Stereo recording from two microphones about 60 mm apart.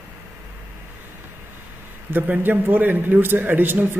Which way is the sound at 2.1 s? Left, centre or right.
Right.